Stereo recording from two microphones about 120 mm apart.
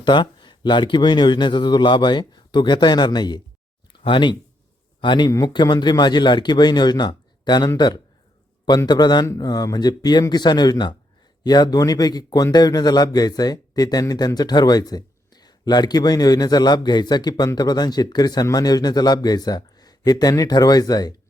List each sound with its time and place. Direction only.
0.0 s a man's voice: 40° left (ahead or behind)
8.9 s a man's voice: 35° left (ahead or behind)